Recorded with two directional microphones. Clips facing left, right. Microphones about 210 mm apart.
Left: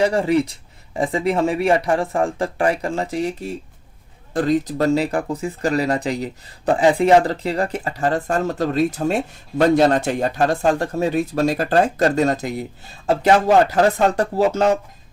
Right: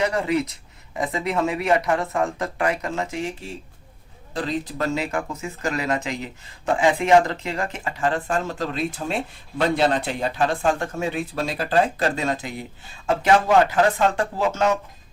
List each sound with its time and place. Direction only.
0.0 s speech: 30° left (ahead or behind)